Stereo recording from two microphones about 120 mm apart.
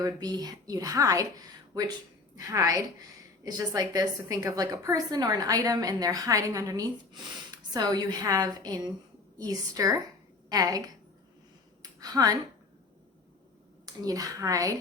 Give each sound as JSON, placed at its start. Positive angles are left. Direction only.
{"t": 0.0, "sound": "a woman's voice", "side_deg": -35}
{"t": 11.8, "sound": "a sound", "side_deg": -30}
{"t": 13.8, "sound": "a woman's voice", "side_deg": -30}